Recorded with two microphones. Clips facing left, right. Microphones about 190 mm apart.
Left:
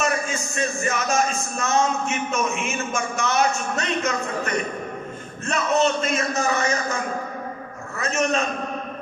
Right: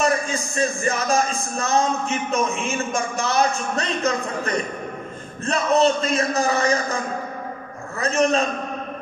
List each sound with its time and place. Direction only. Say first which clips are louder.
0.0 s speech: right 3 dB; 35° right (ahead or behind)
8.0 s speech: right 4 dB; 35° right (ahead or behind)